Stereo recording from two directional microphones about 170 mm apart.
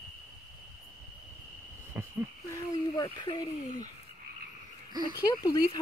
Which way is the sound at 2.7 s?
25° left (ahead or behind).